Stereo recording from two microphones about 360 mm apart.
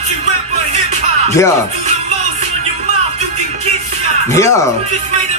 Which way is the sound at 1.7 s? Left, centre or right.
Centre.